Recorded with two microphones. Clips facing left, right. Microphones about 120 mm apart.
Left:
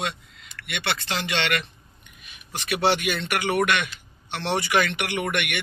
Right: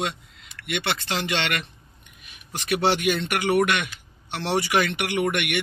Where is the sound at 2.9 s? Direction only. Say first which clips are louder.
Right 2 dB; 20° right (ahead or behind).